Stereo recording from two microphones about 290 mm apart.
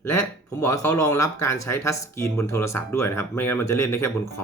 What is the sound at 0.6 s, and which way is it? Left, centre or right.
Speech, left.